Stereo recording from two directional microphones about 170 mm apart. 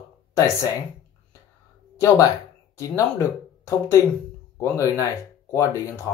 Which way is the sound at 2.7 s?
20° left (ahead or behind).